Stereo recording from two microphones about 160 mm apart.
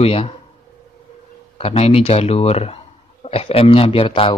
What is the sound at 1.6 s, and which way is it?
A man's voice, 40° left (ahead or behind).